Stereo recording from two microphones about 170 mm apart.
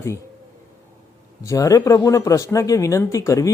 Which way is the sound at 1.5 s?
20° left (ahead or behind).